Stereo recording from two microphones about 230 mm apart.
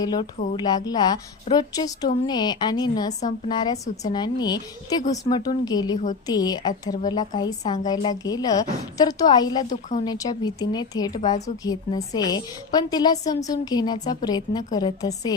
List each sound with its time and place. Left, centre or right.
0.0 s a woman's voice: centre